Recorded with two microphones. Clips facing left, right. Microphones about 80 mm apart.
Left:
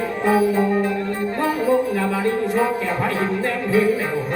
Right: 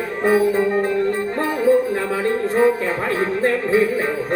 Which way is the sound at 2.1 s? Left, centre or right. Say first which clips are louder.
Right 1 dB; right.